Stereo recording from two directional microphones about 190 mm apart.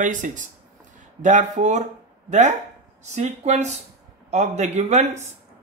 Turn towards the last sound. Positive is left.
turn(degrees=-35)  # may be behind; listen again after turning